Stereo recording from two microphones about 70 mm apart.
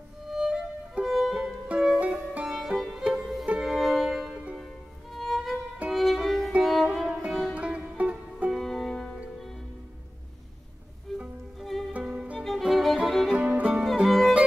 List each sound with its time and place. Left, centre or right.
0.3 s music: centre
2.4 s music: centre
5.9 s violin: centre
6.6 s music: centre
7.2 s sitar: centre
7.5 s music: centre
8.5 s music: centre
11.1 s music: centre
11.9 s music: centre
12.4 s violin: centre
12.6 s music: centre
13.3 s music: centre
14.0 s music: centre